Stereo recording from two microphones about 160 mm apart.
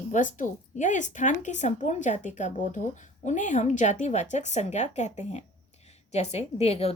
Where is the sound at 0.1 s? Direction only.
55° left (ahead or behind).